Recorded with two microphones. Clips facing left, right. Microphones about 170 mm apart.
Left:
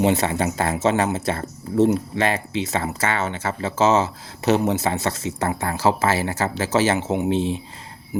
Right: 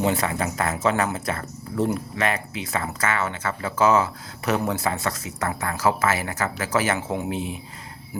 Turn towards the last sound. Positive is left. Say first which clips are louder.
# left 6 dB
turn(degrees=30)  # may be behind; listen again after turning